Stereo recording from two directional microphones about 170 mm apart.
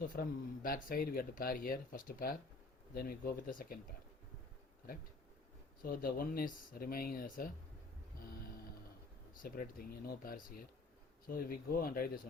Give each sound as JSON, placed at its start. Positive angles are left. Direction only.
{"t": 0.1, "sound": "speech", "side_deg": 55}
{"t": 5.8, "sound": "speech", "side_deg": 60}
{"t": 9.4, "sound": "speech", "side_deg": 55}